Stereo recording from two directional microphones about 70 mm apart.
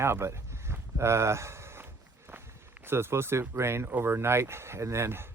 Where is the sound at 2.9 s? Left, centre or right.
Right.